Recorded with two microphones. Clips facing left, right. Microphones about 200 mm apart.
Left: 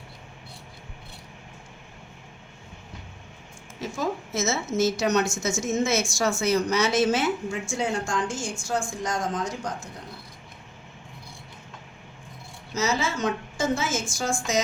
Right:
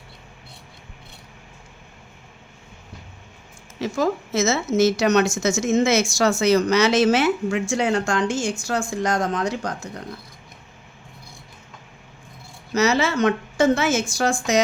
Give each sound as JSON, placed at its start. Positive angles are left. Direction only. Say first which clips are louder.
{"t": 3.8, "sound": "a woman's voice", "louder": "right 7 dB", "side_deg": -85}
{"t": 12.7, "sound": "a woman's voice", "louder": "right 7 dB", "side_deg": -70}